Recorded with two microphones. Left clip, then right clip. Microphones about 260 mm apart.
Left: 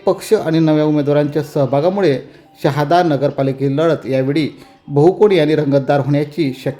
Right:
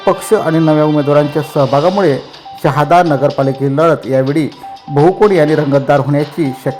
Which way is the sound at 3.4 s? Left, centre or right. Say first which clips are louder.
Right 4 dB; centre.